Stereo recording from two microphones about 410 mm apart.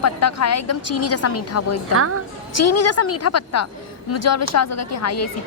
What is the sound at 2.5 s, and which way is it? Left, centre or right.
A woman's voice, left.